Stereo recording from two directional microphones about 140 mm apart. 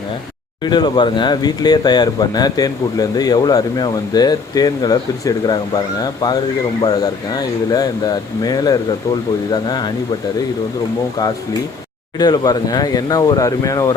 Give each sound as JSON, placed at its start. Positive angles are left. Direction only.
{"t": 0.6, "sound": "speech", "side_deg": 30}
{"t": 12.1, "sound": "speech", "side_deg": 30}